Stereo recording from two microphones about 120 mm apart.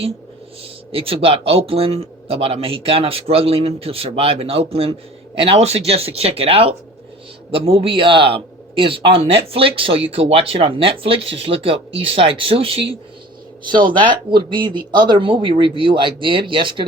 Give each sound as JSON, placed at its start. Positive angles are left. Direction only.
{"t": 0.6, "sound": "speech", "side_deg": -50}
{"t": 13.7, "sound": "speech", "side_deg": -40}